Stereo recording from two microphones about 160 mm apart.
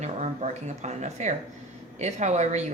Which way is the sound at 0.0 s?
45° right (ahead or behind).